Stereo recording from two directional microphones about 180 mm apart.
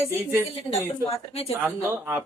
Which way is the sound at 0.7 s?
35° left (ahead or behind).